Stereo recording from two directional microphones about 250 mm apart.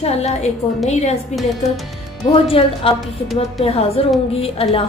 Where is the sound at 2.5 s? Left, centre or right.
Left.